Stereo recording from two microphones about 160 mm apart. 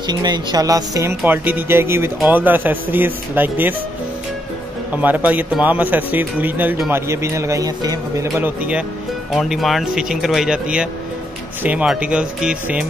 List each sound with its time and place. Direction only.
0.0 s speech: 25° right (ahead or behind)
4.9 s speech: 10° right (ahead or behind)
9.3 s speech: centre (ahead or behind)